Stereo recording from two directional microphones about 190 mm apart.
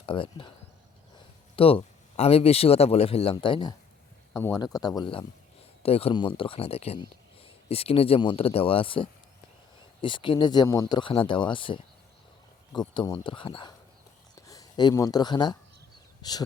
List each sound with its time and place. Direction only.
0.0 s speech: 25° left (ahead or behind)
1.5 s speech: 30° left (ahead or behind)